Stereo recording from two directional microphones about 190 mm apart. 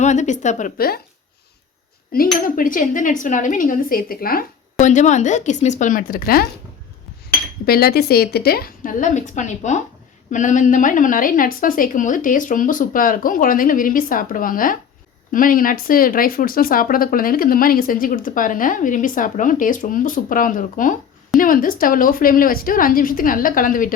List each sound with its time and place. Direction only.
0.0 s a woman's voice: 40° left (ahead or behind)
2.1 s speech: 50° left (ahead or behind)
7.6 s speech: 55° left (ahead or behind)